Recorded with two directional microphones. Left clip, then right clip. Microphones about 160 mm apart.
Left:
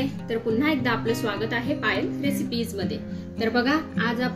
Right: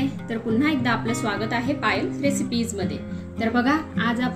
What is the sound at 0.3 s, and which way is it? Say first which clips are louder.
A woman's voice: even; 50° right (ahead or behind).